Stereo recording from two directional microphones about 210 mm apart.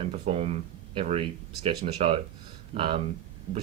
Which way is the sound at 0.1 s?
35° right (ahead or behind).